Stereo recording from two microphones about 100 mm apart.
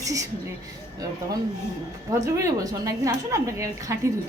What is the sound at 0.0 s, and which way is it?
Speech, 35° right (ahead or behind).